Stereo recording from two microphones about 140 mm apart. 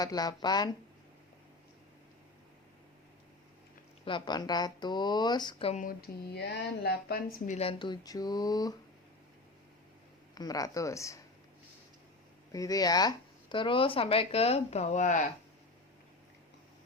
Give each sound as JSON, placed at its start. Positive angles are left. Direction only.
{"t": 0.0, "sound": "speech", "side_deg": 30}
{"t": 4.0, "sound": "speech", "side_deg": 35}
{"t": 5.7, "sound": "speech", "side_deg": 80}
{"t": 6.8, "sound": "a woman's voice", "side_deg": 90}
{"t": 7.6, "sound": "speech", "side_deg": 40}
{"t": 10.3, "sound": "speech", "side_deg": 25}
{"t": 12.5, "sound": "speech", "side_deg": 25}